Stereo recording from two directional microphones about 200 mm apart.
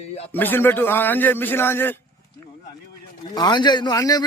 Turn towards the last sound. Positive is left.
turn(degrees=20)  # may be behind; listen again after turning